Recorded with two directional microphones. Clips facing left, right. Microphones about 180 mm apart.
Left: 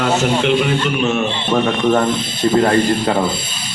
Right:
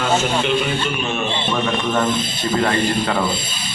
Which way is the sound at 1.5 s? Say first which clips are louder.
Left 7 dB; 40° left (ahead or behind).